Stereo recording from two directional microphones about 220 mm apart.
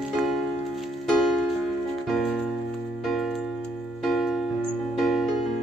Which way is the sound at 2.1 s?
Centre (ahead or behind).